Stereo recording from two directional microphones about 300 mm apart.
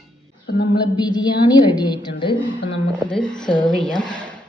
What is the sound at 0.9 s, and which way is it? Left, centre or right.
A woman's voice, centre.